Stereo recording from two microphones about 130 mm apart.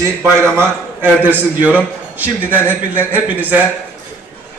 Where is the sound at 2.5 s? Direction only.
15° left (ahead or behind).